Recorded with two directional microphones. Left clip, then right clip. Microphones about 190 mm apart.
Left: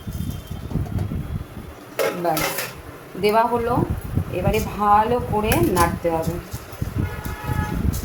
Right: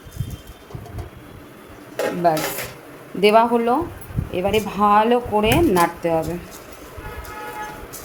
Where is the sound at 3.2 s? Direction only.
60° right (ahead or behind).